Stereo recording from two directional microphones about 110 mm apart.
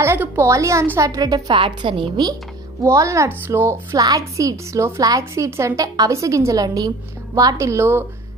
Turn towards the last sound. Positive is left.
turn(degrees=-25)  # may be behind; listen again after turning